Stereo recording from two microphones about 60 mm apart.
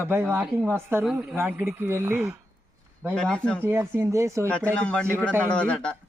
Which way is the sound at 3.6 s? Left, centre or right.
Right.